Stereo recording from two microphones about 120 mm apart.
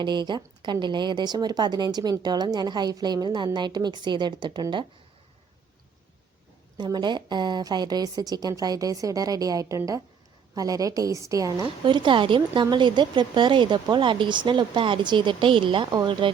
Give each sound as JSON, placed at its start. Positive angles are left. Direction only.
{"t": 0.0, "sound": "speech", "side_deg": -40}
{"t": 6.7, "sound": "a woman's voice", "side_deg": -35}
{"t": 11.6, "sound": "speech", "side_deg": -45}